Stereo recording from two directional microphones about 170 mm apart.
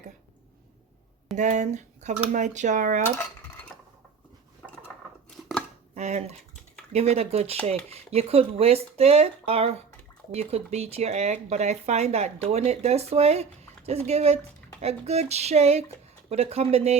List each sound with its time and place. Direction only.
1.4 s speech: 45° right (ahead or behind)
3.0 s cutlery: 10° left (ahead or behind)
5.4 s chopping: centre (ahead or behind)
5.9 s speech: 40° right (ahead or behind)